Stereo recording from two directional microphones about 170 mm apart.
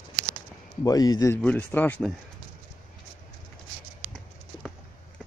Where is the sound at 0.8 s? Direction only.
20° left (ahead or behind).